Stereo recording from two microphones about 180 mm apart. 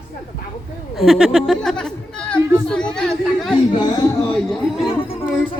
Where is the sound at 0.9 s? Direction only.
Centre (ahead or behind).